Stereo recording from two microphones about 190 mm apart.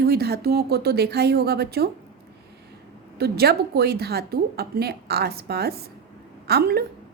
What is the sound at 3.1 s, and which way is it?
A woman's voice, 55° right (ahead or behind).